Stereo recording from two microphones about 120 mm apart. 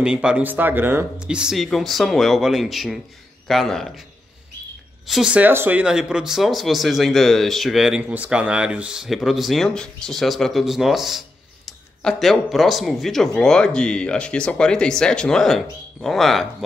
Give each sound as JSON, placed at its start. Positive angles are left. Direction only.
{"t": 0.0, "sound": "speech", "side_deg": -10}
{"t": 5.0, "sound": "speech", "side_deg": -5}